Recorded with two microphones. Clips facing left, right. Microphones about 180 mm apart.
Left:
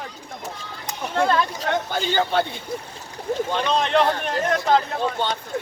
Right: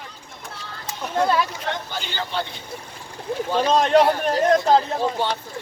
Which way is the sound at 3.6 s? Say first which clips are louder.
Right 5 dB; 45° right (ahead or behind).